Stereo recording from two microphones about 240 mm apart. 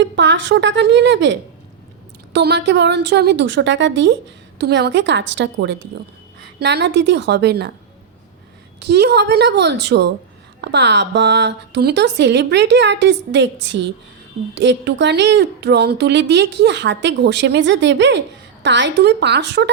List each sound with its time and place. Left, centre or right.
0.0 s a woman's voice: right
8.8 s a woman's voice: right